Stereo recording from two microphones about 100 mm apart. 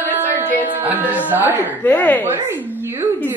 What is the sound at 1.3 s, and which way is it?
Speech, 15° right (ahead or behind).